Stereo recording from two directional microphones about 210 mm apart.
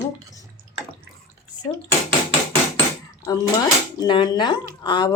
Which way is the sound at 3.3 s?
20° left (ahead or behind).